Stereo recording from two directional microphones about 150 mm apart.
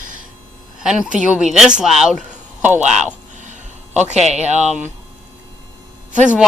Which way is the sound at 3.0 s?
50° right (ahead or behind).